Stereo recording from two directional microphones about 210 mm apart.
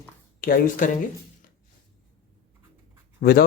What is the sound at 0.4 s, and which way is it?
Speech, 40° left (ahead or behind).